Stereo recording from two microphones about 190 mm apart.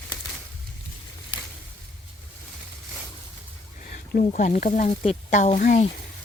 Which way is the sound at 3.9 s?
45° left (ahead or behind).